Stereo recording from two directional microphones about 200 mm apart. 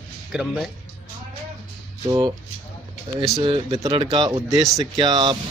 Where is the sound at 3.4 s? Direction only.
25° right (ahead or behind).